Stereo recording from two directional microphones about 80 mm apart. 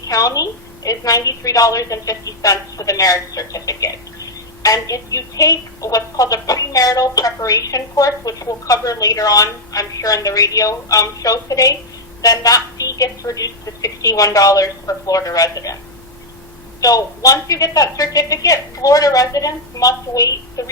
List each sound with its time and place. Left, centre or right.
0.0 s a woman's voice: left
16.8 s a woman's voice: left